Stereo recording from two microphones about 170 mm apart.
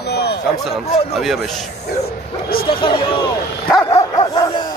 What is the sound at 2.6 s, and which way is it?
Speech, 30° left (ahead or behind).